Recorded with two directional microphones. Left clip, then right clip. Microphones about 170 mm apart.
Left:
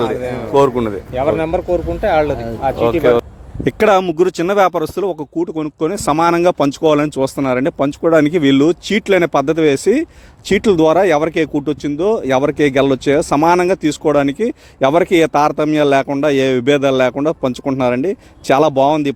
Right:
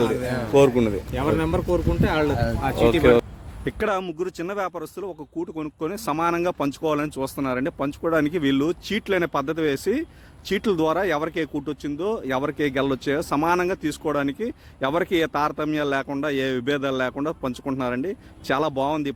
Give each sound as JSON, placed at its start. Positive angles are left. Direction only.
{"t": 0.5, "sound": "speech", "side_deg": -15}
{"t": 1.1, "sound": "speech", "side_deg": -35}
{"t": 3.0, "sound": "speech", "side_deg": -25}
{"t": 3.6, "sound": "speech", "side_deg": 50}